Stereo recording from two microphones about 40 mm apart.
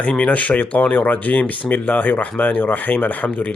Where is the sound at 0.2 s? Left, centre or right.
Left.